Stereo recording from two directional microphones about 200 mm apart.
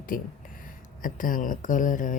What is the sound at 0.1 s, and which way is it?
Speech, 45° left (ahead or behind).